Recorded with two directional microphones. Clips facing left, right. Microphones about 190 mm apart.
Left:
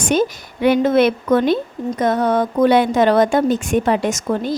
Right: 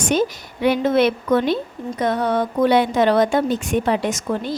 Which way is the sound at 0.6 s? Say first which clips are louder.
Left 3 dB; 50° left (ahead or behind).